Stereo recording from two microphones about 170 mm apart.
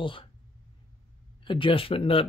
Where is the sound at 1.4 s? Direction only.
30° left (ahead or behind).